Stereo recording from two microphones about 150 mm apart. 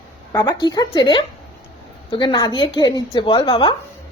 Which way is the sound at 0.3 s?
30° left (ahead or behind).